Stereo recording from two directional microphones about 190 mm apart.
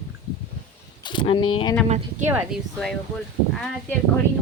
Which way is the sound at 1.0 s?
25° left (ahead or behind).